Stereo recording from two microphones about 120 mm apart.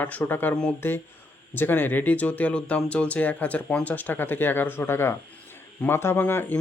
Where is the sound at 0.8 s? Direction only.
20° left (ahead or behind).